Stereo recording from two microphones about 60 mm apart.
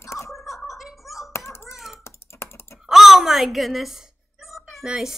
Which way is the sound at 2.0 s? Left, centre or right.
Left.